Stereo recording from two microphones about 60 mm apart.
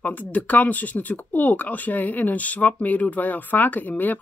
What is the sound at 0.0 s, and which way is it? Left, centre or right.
Speech, left.